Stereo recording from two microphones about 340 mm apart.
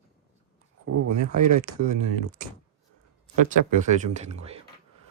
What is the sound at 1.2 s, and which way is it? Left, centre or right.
Speech, left.